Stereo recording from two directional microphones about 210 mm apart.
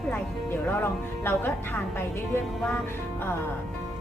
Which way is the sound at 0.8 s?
10° left (ahead or behind).